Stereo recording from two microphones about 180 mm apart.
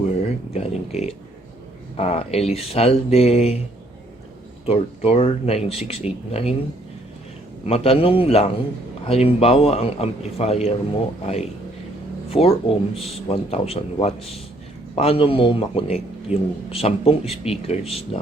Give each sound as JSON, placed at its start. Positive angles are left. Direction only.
{"t": 0.5, "sound": "a man's voice", "side_deg": 35}
{"t": 4.6, "sound": "a man's voice", "side_deg": 35}
{"t": 7.7, "sound": "a man's voice", "side_deg": 30}